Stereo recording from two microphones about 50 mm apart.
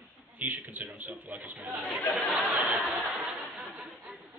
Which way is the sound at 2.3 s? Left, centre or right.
Right.